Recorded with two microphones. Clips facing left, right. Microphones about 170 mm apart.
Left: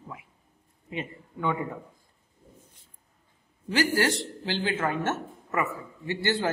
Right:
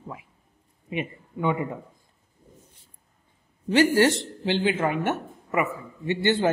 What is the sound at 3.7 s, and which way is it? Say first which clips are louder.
Speech: right 6 dB; 25° right (ahead or behind).